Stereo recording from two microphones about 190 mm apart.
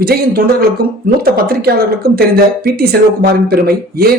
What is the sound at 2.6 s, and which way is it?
Speech, 55° right (ahead or behind).